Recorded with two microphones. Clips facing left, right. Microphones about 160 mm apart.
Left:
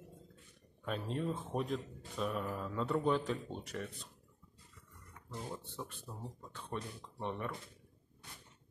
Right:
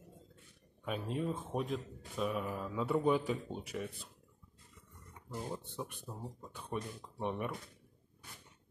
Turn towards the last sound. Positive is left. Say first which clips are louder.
# right 2 dB
turn(degrees=-15)  # may be behind; listen again after turning